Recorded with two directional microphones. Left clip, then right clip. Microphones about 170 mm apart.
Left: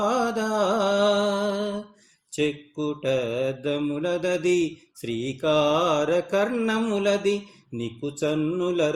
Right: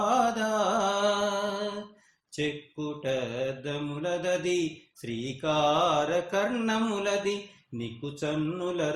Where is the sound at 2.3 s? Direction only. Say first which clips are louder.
Left 6 dB; 45° left (ahead or behind).